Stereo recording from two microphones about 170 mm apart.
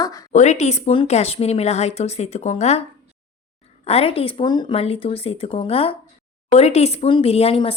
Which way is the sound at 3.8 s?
35° left (ahead or behind).